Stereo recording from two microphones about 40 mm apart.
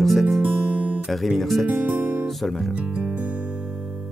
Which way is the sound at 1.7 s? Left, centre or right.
Right.